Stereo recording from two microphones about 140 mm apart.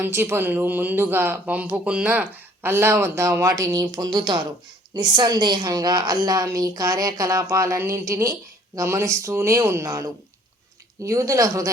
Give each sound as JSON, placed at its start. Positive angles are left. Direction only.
{"t": 0.0, "sound": "a woman's voice", "side_deg": -15}